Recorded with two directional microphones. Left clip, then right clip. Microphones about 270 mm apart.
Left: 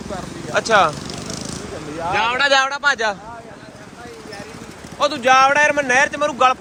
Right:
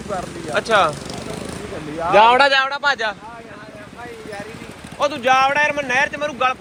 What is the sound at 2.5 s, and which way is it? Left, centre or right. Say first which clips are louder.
Speech: left 1 dB; centre.